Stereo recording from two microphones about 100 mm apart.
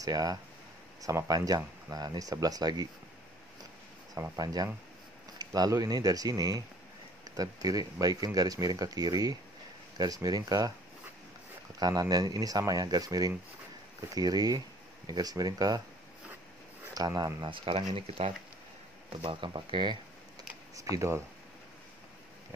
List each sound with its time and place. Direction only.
0.0 s speech: 40° right (ahead or behind)
4.4 s speech: 40° right (ahead or behind)
11.8 s speech: 35° right (ahead or behind)
16.9 s speech: 40° right (ahead or behind)
17.4 s speech: 55° right (ahead or behind)
19.0 s speech: 55° right (ahead or behind)
20.7 s speech: 30° right (ahead or behind)